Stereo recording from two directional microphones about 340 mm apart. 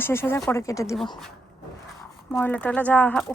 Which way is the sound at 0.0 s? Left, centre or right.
Centre.